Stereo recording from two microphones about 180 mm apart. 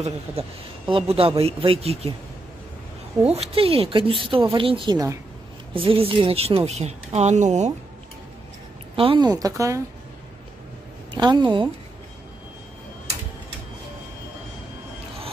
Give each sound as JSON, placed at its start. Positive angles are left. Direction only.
{"t": 0.0, "sound": "speech", "side_deg": -30}
{"t": 3.3, "sound": "speech", "side_deg": -35}
{"t": 5.8, "sound": "speech", "side_deg": -30}
{"t": 8.9, "sound": "speech", "side_deg": -30}
{"t": 11.1, "sound": "speech", "side_deg": -25}